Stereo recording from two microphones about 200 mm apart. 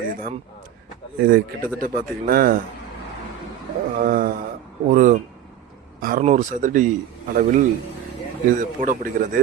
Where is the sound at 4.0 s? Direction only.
45° right (ahead or behind).